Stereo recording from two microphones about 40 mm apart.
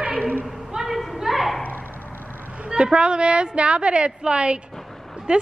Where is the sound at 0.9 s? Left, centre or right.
Centre.